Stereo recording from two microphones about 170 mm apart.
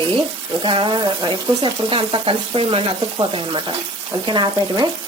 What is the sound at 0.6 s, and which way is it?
Speech, 30° right (ahead or behind).